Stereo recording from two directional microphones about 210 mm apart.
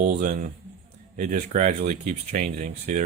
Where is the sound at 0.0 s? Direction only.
35° right (ahead or behind).